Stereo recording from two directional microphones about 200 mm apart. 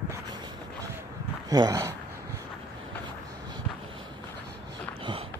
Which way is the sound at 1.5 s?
20° right (ahead or behind).